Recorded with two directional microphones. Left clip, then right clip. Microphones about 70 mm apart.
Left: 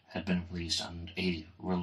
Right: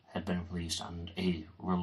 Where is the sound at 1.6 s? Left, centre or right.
Left.